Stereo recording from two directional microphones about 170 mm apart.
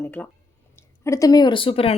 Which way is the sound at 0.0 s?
10° left (ahead or behind).